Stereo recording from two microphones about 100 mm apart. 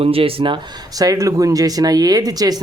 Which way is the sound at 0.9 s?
35° right (ahead or behind).